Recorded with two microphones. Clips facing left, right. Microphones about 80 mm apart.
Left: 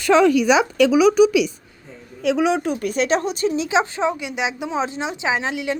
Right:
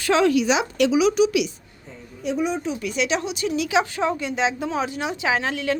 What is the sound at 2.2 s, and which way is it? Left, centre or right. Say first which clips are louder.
A woman's voice: left 5 dB; left.